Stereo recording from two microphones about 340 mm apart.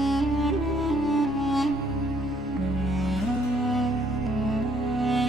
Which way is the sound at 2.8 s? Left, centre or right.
Centre.